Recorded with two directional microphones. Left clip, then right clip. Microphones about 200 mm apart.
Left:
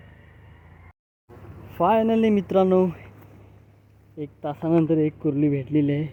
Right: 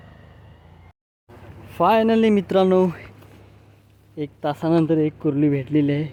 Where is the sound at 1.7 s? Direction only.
15° right (ahead or behind).